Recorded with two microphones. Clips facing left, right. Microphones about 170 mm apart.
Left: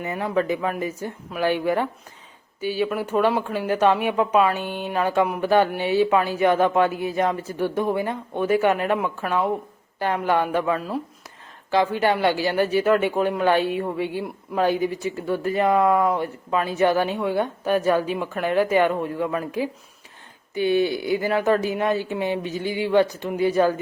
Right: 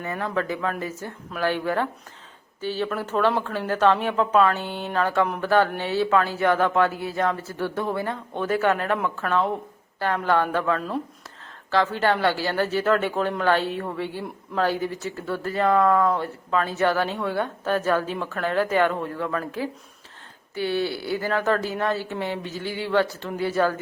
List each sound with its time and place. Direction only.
0.0 s speech: 15° left (ahead or behind)